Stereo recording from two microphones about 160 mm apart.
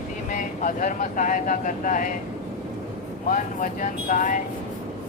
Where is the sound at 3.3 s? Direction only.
55° left (ahead or behind).